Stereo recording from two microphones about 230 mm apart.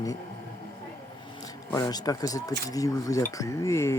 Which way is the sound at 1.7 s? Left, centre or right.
Centre.